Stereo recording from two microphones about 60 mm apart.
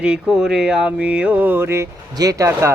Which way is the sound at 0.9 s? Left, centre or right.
Right.